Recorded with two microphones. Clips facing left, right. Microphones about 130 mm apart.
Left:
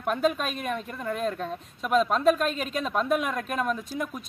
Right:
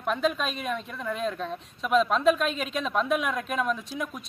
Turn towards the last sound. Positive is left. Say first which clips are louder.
# even
turn(degrees=0)  # may be behind; listen again after turning